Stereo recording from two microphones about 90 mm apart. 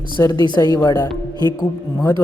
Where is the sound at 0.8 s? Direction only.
45° left (ahead or behind).